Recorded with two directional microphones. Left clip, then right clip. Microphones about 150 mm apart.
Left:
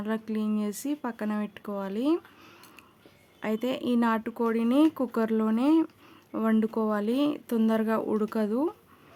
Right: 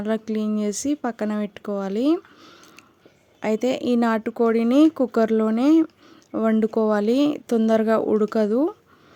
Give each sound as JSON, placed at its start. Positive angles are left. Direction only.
{"t": 0.0, "sound": "speech", "side_deg": -35}
{"t": 3.4, "sound": "speech", "side_deg": -35}